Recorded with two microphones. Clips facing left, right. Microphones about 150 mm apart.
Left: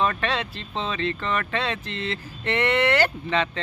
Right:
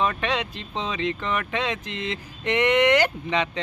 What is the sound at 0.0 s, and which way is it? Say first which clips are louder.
Speech: even; 15° right (ahead or behind).